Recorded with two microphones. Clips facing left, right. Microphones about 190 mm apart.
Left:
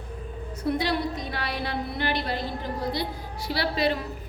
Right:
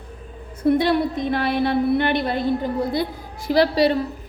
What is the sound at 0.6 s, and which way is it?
A woman's voice, 55° right (ahead or behind).